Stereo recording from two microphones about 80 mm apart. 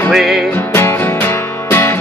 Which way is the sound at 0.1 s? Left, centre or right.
Centre.